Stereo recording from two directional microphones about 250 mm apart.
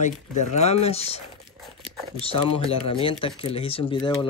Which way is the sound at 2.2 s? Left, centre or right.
Left.